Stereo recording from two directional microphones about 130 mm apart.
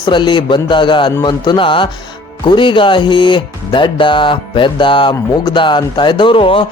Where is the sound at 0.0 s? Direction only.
35° left (ahead or behind).